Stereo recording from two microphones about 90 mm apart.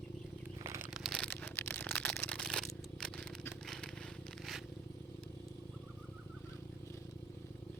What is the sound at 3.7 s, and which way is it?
Crackle, 5° left (ahead or behind).